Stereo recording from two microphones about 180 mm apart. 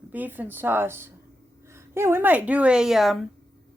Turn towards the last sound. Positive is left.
turn(degrees=0)  # may be behind; listen again after turning